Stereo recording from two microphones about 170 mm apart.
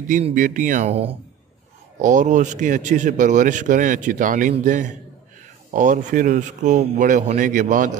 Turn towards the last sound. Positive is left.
turn(degrees=-50)  # may be behind; listen again after turning